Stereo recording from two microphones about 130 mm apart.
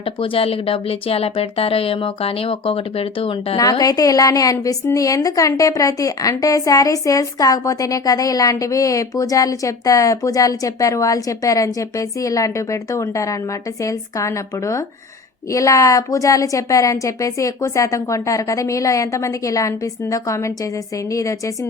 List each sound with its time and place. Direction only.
0.0 s speech: 45° left (ahead or behind)
3.6 s a woman's voice: 30° left (ahead or behind)